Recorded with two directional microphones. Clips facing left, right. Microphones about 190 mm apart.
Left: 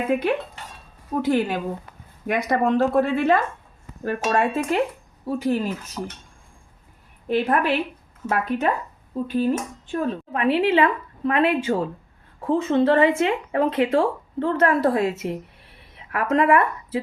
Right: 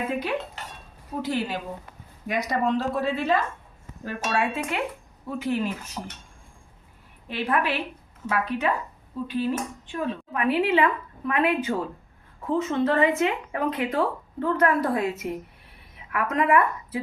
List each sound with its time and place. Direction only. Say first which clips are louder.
0.1 s dishes: left 7 dB; 55° left (ahead or behind)
1.2 s speech: left 6 dB; 50° left (ahead or behind)
7.3 s speech: left 5 dB; 45° left (ahead or behind)
10.3 s speech: left 3 dB; 30° left (ahead or behind)